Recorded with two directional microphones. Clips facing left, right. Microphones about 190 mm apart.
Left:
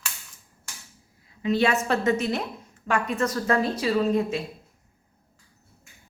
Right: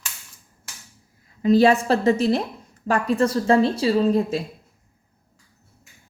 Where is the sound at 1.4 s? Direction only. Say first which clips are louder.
Right 7 dB; 35° right (ahead or behind).